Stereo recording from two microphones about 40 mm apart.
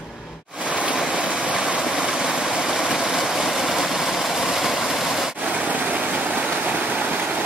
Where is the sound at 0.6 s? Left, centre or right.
Right.